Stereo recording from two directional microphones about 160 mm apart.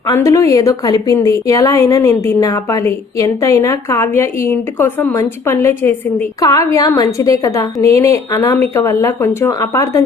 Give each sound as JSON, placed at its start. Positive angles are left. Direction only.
{"t": 0.1, "sound": "a woman's voice", "side_deg": 20}